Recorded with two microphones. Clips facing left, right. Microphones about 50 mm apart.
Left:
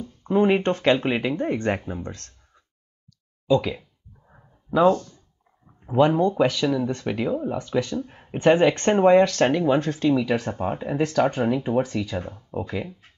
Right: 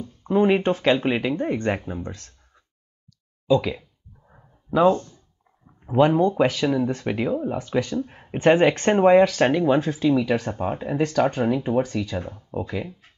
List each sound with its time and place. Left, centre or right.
0.0 s a sound: centre
0.6 s speech: centre
4.7 s speech: right
6.1 s speech: centre